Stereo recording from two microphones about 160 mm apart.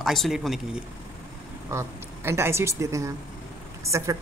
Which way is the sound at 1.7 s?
15° right (ahead or behind).